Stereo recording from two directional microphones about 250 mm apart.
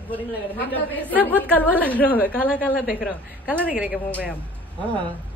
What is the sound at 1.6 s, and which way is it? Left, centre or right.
Speech, centre.